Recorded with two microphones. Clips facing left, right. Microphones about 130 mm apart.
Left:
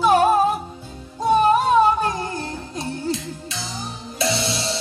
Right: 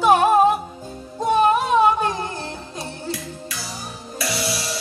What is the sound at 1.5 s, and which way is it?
Music, 40° left (ahead or behind).